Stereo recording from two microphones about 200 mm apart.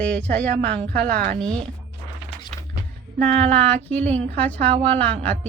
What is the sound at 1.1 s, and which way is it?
Speech, 45° right (ahead or behind).